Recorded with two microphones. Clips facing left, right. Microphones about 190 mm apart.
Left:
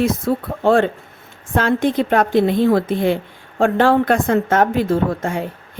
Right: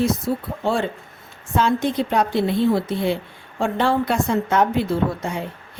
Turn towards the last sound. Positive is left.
turn(degrees=50)  # may be behind; listen again after turning